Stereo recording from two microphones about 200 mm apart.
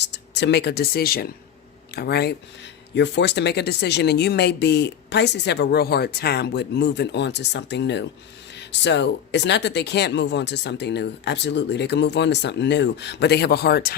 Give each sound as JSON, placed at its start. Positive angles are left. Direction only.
{"t": 0.0, "sound": "speech", "side_deg": 60}